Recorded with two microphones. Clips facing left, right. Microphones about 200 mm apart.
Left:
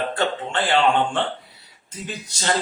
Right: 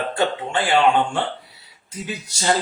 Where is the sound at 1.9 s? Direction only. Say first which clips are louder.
Right 2 dB; 10° right (ahead or behind).